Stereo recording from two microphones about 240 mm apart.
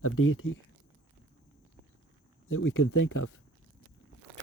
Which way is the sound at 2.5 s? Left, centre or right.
Left.